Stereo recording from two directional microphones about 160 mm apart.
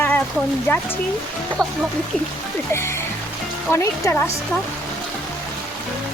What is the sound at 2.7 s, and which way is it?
Speech, 15° left (ahead or behind).